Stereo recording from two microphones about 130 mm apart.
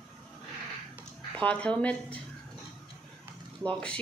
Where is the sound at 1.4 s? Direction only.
10° left (ahead or behind).